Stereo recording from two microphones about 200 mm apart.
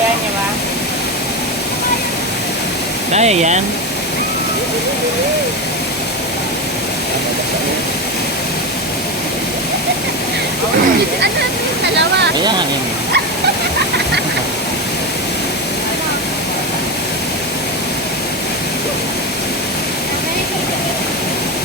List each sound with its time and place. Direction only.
3.1 s speech: 35° right (ahead or behind)